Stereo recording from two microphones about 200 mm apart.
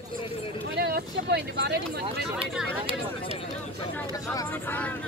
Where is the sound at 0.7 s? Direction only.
55° right (ahead or behind).